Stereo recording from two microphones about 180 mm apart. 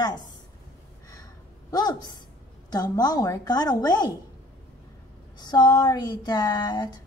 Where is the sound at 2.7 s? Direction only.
20° left (ahead or behind).